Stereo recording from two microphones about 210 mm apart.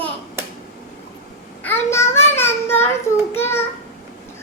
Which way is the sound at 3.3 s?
10° left (ahead or behind).